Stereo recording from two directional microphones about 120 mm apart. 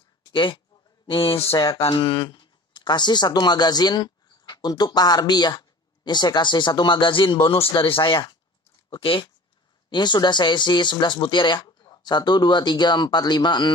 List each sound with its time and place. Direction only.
0.3 s speech: 45° left (ahead or behind)